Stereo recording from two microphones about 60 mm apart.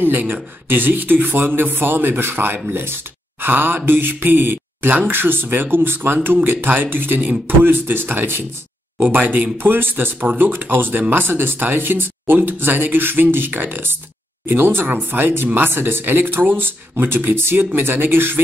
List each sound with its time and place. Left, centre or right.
0.0 s a man's voice: right